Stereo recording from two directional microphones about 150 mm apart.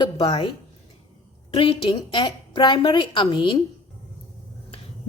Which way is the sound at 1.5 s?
35° left (ahead or behind).